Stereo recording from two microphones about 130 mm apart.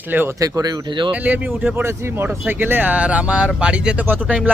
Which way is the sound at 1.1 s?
15° right (ahead or behind).